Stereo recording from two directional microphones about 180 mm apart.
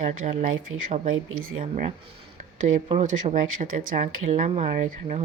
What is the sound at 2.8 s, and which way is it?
Speech, 35° right (ahead or behind).